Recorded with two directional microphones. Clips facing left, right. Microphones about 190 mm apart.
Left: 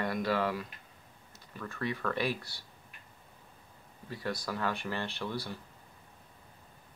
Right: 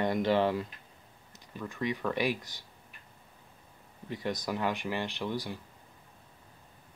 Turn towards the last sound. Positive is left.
turn(degrees=-15)  # may be behind; listen again after turning